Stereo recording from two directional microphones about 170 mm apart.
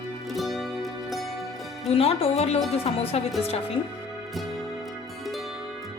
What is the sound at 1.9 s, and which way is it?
Speech, 35° left (ahead or behind).